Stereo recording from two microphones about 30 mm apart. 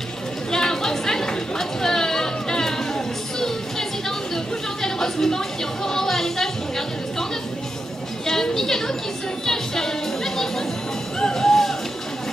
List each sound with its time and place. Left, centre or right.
0.5 s chatter: centre
4.8 s music: centre
8.3 s a sound: centre
9.5 s music: centre